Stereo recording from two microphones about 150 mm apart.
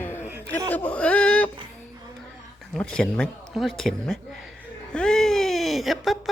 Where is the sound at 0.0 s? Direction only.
15° left (ahead or behind).